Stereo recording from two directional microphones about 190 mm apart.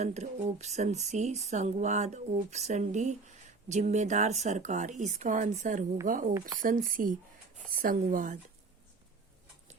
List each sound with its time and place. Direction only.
0.0 s speech: 35° right (ahead or behind)